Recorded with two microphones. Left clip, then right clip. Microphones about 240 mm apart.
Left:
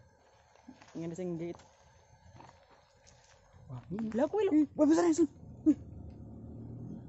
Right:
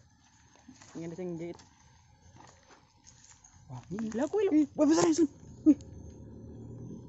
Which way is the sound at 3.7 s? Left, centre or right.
Centre.